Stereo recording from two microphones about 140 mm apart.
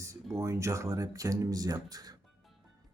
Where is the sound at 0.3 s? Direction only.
20° right (ahead or behind).